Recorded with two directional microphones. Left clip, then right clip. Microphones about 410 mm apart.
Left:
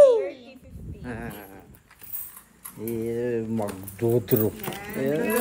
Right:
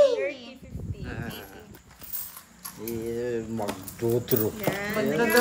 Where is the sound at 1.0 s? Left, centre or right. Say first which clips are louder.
Left 2 dB; centre.